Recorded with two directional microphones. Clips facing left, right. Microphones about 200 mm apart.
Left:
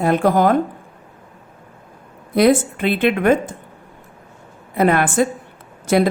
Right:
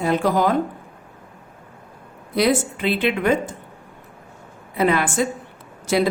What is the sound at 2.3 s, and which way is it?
Speech, 55° left (ahead or behind).